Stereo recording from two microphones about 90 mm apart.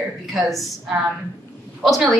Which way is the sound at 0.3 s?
Centre (ahead or behind).